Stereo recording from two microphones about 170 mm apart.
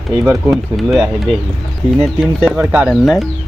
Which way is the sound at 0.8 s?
Centre (ahead or behind).